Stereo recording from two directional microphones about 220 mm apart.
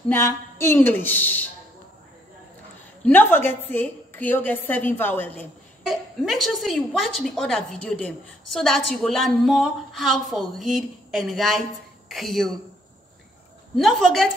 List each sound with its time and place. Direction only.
0.1 s a woman's voice: 10° left (ahead or behind)
3.0 s a woman's voice: 10° left (ahead or behind)
13.7 s a woman's voice: centre (ahead or behind)